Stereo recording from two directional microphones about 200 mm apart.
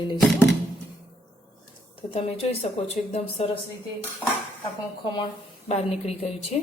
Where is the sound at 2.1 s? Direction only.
30° left (ahead or behind).